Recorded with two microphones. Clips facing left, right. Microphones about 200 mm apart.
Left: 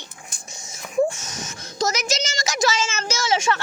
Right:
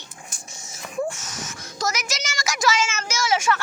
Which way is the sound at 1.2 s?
15° left (ahead or behind).